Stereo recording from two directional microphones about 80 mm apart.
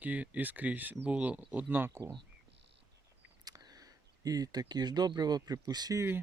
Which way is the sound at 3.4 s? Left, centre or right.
Right.